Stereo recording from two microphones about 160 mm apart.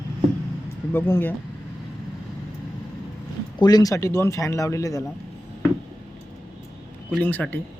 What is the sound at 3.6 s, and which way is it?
Speech, 25° left (ahead or behind).